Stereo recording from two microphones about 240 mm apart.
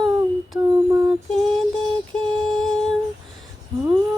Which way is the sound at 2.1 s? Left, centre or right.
Centre.